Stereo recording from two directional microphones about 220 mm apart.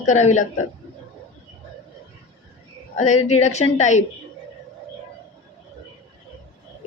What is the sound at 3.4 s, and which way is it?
Speech, 30° left (ahead or behind).